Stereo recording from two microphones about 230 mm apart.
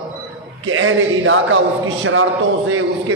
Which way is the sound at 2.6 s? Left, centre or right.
Right.